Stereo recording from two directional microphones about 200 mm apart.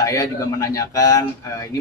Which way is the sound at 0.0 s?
15° left (ahead or behind).